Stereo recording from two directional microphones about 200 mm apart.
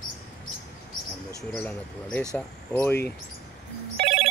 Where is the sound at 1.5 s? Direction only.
5° left (ahead or behind).